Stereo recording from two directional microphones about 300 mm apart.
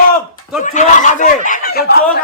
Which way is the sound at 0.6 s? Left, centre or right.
Left.